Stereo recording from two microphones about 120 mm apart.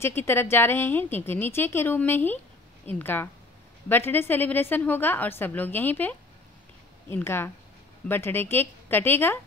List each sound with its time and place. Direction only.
0.0 s a woman's voice: 20° left (ahead or behind)